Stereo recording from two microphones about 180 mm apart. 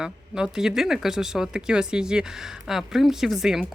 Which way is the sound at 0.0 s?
5° right (ahead or behind).